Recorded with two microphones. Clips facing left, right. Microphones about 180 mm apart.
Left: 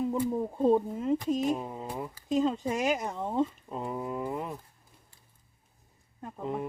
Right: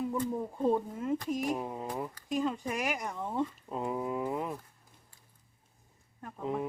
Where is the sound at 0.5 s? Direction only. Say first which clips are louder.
Left 5 dB; 25° left (ahead or behind).